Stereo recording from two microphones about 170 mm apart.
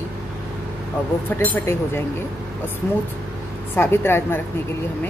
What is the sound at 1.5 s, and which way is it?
Speech, 15° left (ahead or behind).